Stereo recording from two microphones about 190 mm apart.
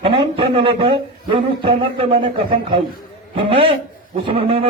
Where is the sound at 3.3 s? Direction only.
30° right (ahead or behind).